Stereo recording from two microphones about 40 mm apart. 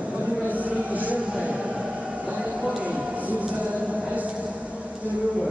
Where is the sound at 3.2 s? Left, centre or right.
Right.